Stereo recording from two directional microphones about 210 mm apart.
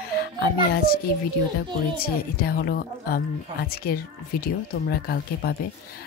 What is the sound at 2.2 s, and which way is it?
Speech, 45° left (ahead or behind).